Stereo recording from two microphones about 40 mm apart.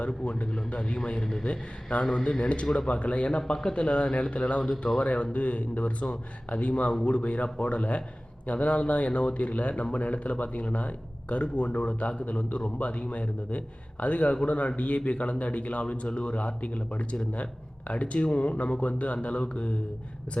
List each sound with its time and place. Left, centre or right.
0.0 s a man's voice: left
4.7 s a man's voice: centre
4.9 s a man's voice: left